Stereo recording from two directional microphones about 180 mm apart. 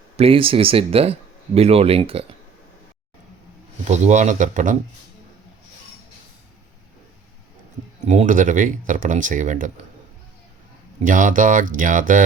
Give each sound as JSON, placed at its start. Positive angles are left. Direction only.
{"t": 0.2, "sound": "speech", "side_deg": -30}
{"t": 3.8, "sound": "speech", "side_deg": -40}
{"t": 8.0, "sound": "speech", "side_deg": -40}
{"t": 11.0, "sound": "speech", "side_deg": -45}